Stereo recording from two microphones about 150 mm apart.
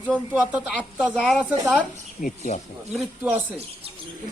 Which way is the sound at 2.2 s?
50° left (ahead or behind).